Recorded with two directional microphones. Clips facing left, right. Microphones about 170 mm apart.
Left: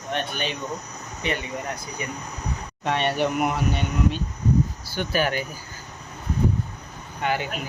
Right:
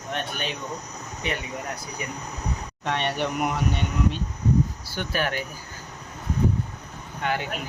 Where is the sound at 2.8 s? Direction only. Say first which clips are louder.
Left 3 dB; 5° left (ahead or behind).